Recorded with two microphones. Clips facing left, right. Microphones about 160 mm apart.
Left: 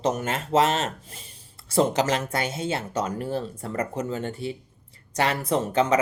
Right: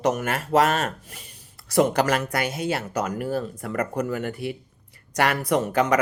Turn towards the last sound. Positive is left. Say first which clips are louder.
# right 1 dB
turn(degrees=25)  # may be behind; listen again after turning